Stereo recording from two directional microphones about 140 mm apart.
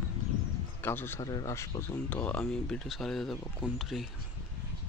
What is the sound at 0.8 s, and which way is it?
Speech, 15° left (ahead or behind).